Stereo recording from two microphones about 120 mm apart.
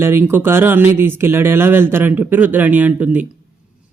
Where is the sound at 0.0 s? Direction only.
20° right (ahead or behind).